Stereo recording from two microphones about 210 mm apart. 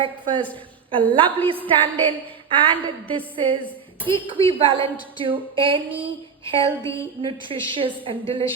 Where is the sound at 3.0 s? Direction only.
25° right (ahead or behind).